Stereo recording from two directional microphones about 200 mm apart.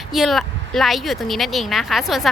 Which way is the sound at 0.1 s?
Centre (ahead or behind).